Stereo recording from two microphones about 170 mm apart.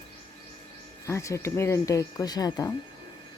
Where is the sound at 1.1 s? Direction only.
15° left (ahead or behind).